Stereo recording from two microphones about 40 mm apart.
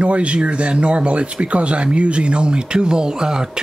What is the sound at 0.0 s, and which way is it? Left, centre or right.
Speech, right.